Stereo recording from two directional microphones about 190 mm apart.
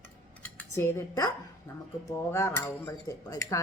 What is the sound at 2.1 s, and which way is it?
Speech, 15° left (ahead or behind).